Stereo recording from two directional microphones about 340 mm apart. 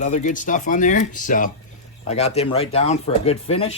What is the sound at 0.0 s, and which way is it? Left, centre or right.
Speech, left.